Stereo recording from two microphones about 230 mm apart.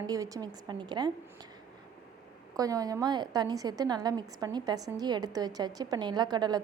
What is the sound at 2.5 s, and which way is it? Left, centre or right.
A woman's voice, centre.